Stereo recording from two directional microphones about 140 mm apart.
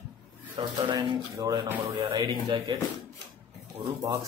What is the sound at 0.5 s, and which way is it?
Speech, 35° right (ahead or behind).